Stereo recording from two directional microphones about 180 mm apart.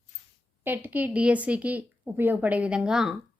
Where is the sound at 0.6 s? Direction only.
10° right (ahead or behind).